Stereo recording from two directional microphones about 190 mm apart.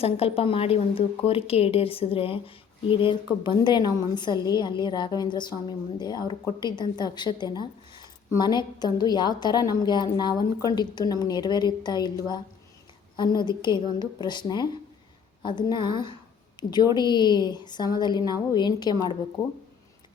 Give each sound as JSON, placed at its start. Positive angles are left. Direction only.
{"t": 0.0, "sound": "a woman's voice", "side_deg": 30}
{"t": 13.1, "sound": "a woman's voice", "side_deg": 20}